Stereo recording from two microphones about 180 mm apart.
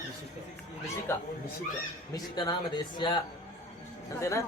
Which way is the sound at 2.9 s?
25° left (ahead or behind).